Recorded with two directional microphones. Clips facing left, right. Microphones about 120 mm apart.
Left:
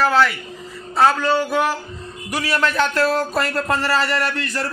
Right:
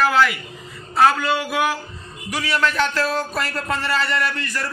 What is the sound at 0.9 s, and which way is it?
Speech, 25° left (ahead or behind).